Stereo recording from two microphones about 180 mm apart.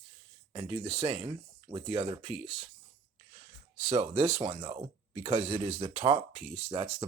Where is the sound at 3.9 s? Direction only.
40° right (ahead or behind).